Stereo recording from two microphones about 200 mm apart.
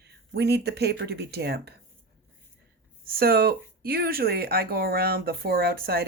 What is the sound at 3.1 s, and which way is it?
Speech, 50° right (ahead or behind).